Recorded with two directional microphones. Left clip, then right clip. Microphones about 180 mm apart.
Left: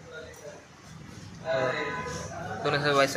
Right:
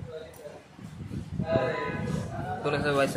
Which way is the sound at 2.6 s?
20° right (ahead or behind).